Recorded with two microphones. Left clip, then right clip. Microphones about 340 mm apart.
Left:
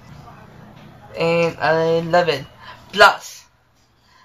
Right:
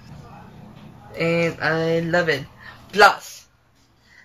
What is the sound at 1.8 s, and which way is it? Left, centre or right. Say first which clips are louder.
Speech: left 4 dB; left.